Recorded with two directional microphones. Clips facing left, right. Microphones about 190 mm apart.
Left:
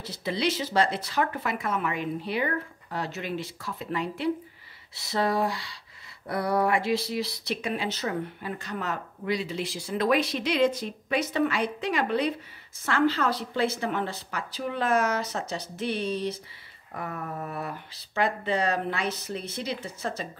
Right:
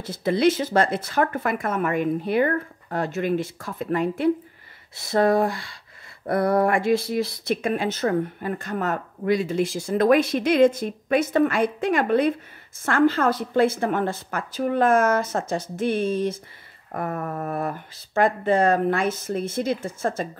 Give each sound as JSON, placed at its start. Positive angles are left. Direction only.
{"t": 0.0, "sound": "speech", "side_deg": -50}